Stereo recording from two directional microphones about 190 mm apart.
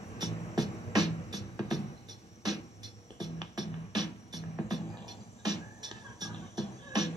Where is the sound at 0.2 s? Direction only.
20° right (ahead or behind).